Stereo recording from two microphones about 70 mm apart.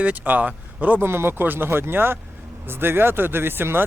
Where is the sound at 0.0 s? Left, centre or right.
Right.